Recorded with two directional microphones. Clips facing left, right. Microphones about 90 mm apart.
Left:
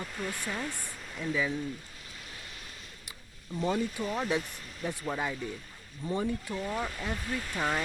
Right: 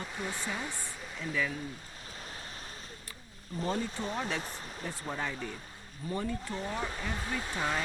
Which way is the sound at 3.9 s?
30° right (ahead or behind).